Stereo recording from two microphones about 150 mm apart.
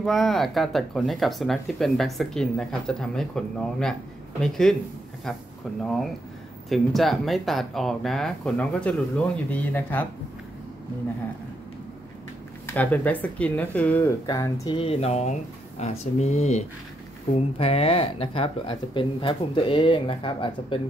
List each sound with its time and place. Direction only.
0.0 s speech: centre (ahead or behind)
6.7 s speech: centre (ahead or behind)
12.6 s speech: 10° left (ahead or behind)
14.2 s speech: 25° left (ahead or behind)
14.8 s speech: 40° left (ahead or behind)